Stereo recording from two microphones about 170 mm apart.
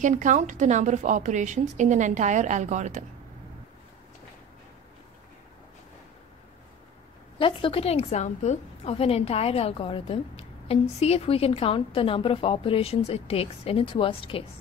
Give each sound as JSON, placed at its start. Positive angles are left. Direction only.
{"t": 0.0, "sound": "a woman's voice", "side_deg": -45}
{"t": 7.3, "sound": "a woman's voice", "side_deg": 30}